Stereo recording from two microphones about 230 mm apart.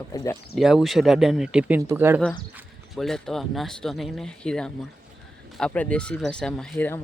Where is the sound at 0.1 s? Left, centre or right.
Centre.